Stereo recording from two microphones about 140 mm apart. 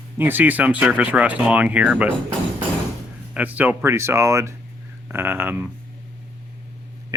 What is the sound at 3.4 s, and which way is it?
Speech, 10° right (ahead or behind).